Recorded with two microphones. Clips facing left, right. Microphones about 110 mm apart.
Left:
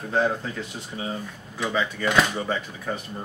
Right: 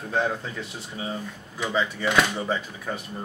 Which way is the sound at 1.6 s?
Centre (ahead or behind).